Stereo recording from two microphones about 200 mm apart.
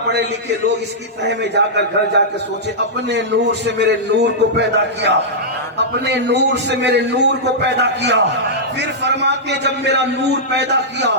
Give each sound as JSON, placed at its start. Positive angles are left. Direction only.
{"t": 1.5, "sound": "a man's voice", "side_deg": -60}